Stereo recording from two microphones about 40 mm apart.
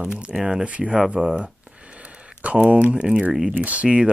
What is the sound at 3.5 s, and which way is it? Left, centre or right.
Speech, right.